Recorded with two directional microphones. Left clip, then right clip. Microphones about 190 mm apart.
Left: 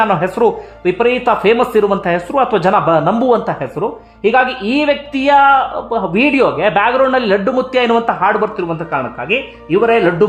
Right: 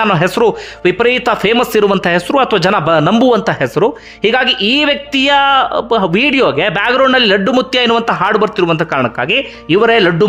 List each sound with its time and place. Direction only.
0.1 s speech: 25° right (ahead or behind)